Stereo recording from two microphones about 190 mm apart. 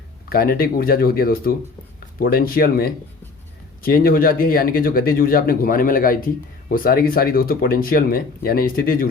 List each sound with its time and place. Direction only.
0.3 s speech: 50° left (ahead or behind)